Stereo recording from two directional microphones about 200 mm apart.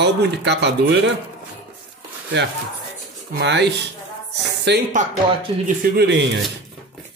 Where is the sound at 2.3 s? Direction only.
60° right (ahead or behind).